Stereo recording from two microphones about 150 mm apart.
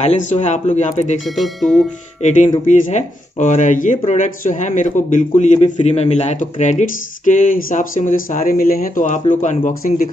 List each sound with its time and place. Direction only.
0.0 s speech: 50° left (ahead or behind)
1.3 s speech: centre (ahead or behind)
2.2 s a man's voice: 50° left (ahead or behind)